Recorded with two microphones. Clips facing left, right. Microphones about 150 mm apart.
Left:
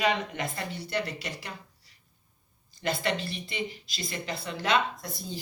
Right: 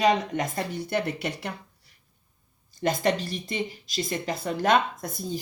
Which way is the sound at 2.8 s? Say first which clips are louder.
Right 5 dB; 45° right (ahead or behind).